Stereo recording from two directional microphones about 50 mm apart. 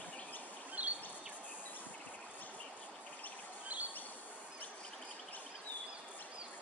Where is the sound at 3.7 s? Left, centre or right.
Right.